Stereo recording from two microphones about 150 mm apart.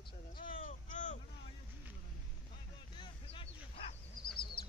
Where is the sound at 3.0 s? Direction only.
35° left (ahead or behind).